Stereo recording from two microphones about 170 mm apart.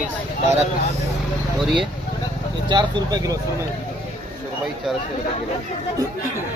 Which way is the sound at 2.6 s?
25° right (ahead or behind).